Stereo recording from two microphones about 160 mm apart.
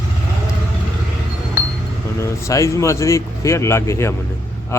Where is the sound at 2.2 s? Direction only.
20° left (ahead or behind).